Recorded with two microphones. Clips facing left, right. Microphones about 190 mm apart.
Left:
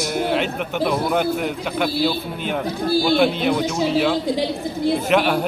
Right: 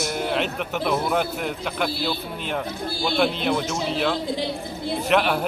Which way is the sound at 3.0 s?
Centre (ahead or behind).